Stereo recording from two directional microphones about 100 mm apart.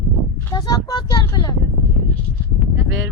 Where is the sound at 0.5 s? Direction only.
40° left (ahead or behind).